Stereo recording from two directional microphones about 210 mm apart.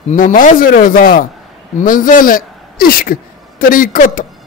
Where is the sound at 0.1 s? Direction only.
40° left (ahead or behind).